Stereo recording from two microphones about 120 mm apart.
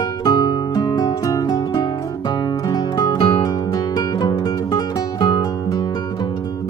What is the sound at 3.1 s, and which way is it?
Music, 45° left (ahead or behind).